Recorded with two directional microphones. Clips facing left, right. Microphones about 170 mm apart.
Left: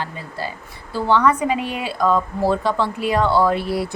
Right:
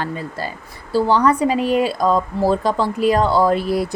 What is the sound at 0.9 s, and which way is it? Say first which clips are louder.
A woman's voice: right 2 dB; 35° right (ahead or behind).